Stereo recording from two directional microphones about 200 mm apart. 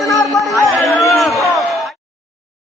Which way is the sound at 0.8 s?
Centre (ahead or behind).